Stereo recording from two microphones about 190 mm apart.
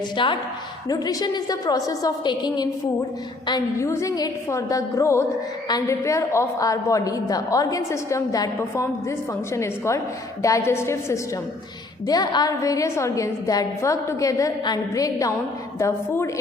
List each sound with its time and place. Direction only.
0.2 s a woman's voice: 25° left (ahead or behind)